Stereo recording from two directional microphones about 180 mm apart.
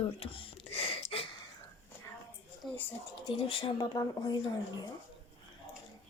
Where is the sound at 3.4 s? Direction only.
30° left (ahead or behind).